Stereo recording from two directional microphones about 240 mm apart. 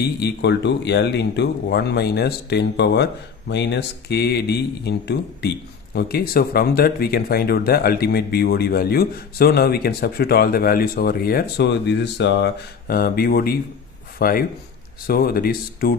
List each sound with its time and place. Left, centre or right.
0.0 s speech: left